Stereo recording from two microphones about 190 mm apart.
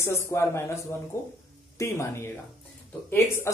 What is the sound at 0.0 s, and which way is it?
Speech, 15° left (ahead or behind).